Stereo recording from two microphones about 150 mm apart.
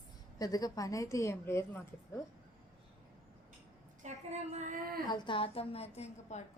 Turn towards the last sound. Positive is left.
turn(degrees=50)  # may be behind; listen again after turning